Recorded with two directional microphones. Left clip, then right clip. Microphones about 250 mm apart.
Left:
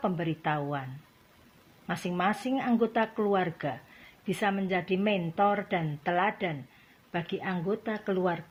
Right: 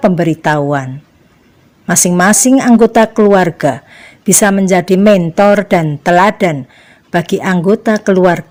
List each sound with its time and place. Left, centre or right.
0.0 s speech: right
1.9 s speech: right